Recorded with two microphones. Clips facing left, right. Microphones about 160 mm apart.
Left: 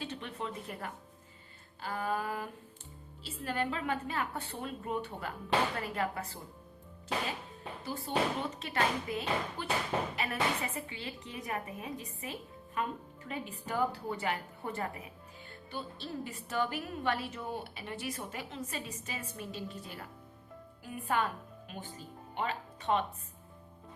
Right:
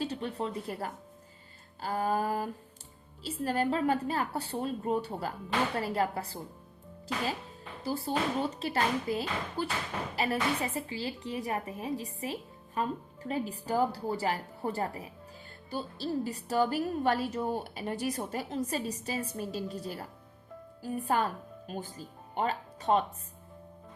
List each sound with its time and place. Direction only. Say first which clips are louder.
0.0 s a woman's voice: right 6 dB; 35° right (ahead or behind)
7.8 s a woman's voice: right 2 dB; 35° right (ahead or behind)